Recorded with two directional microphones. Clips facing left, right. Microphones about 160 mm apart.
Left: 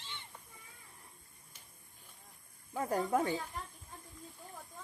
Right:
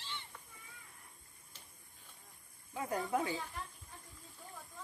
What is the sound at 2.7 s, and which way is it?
Speech, 45° left (ahead or behind).